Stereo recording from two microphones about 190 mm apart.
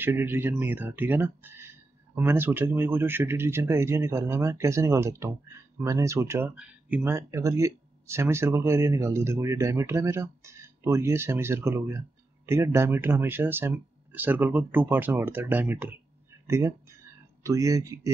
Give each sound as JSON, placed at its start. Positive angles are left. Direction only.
{"t": 0.0, "sound": "speech", "side_deg": -10}